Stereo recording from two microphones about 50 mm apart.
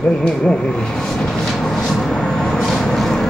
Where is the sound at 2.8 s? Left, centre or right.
Centre.